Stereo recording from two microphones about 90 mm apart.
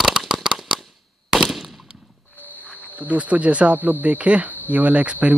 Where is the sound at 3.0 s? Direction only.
15° right (ahead or behind).